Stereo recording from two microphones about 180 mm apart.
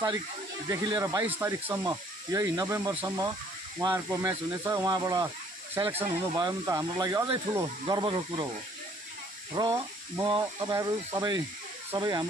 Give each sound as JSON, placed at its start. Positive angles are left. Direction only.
{"t": 0.7, "sound": "speech", "side_deg": -20}
{"t": 9.5, "sound": "speech", "side_deg": -20}